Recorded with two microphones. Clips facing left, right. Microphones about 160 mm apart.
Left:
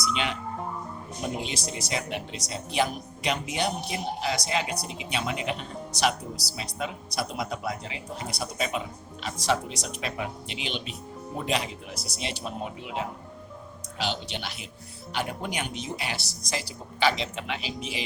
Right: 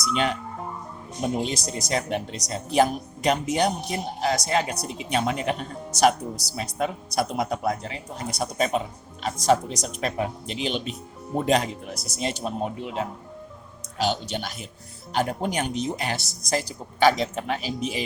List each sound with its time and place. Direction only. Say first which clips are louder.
0.0 s a woman's voice: right 5 dB; 45° right (ahead or behind)
1.4 s a woman's voice: right 5 dB; 40° right (ahead or behind)